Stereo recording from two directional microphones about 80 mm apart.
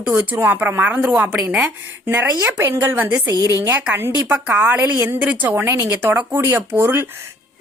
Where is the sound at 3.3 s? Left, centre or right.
Right.